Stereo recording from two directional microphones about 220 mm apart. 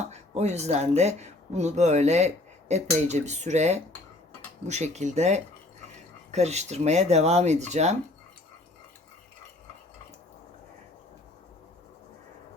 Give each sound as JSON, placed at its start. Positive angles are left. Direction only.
{"t": 0.0, "sound": "speech", "side_deg": -30}